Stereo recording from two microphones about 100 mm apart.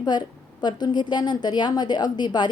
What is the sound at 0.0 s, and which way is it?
A woman's voice, 45° left (ahead or behind).